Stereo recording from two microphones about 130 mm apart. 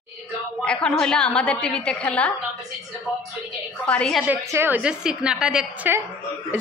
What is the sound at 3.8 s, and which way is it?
Speech, 10° left (ahead or behind).